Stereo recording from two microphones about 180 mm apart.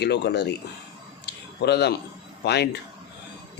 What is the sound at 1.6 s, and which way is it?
Speech, 65° left (ahead or behind).